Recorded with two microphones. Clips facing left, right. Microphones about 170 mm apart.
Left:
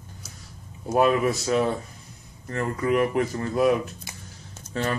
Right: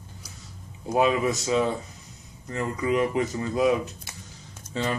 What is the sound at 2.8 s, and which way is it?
Speech, 55° left (ahead or behind).